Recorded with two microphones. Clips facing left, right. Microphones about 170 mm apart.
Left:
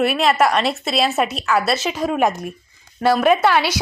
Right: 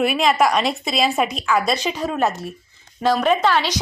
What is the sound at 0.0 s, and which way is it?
A woman's voice, centre (ahead or behind).